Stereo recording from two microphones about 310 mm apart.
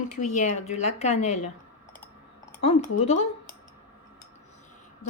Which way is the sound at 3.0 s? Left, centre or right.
Left.